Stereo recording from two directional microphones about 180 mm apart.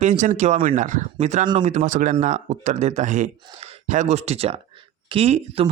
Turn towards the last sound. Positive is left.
turn(degrees=-35)  # may be behind; listen again after turning